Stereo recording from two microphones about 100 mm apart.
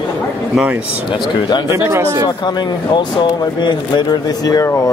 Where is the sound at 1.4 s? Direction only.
50° left (ahead or behind).